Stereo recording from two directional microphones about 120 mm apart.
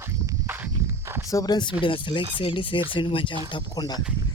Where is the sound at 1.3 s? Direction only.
30° left (ahead or behind).